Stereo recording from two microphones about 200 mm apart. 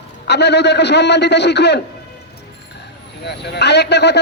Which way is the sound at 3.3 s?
55° left (ahead or behind).